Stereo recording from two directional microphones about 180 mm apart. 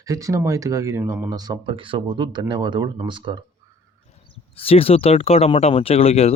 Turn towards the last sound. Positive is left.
turn(degrees=35)  # may be behind; listen again after turning